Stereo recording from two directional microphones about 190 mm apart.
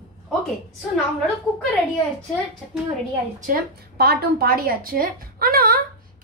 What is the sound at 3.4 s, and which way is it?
A woman's voice, 50° right (ahead or behind).